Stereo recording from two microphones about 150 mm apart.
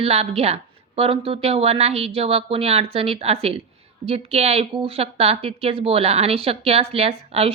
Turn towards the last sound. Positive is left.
turn(degrees=-40)  # may be behind; listen again after turning